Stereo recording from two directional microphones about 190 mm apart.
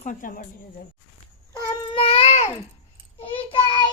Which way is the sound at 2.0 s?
30° left (ahead or behind).